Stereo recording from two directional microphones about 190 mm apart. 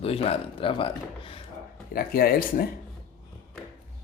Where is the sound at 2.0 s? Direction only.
50° left (ahead or behind).